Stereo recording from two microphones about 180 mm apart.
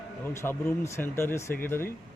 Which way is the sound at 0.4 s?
15° left (ahead or behind).